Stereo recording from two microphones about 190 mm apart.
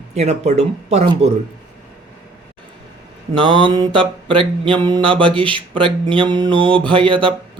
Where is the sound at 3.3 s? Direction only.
25° right (ahead or behind).